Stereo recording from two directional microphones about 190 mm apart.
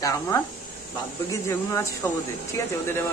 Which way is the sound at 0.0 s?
20° left (ahead or behind).